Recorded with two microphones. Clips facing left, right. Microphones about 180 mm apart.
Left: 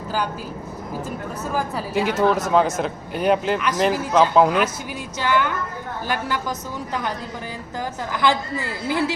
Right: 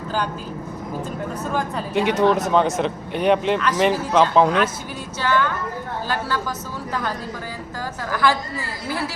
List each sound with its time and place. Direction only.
1.5 s a man's voice: 5° left (ahead or behind)
5.2 s a woman's voice: 15° left (ahead or behind)
8.1 s a woman's voice: 20° left (ahead or behind)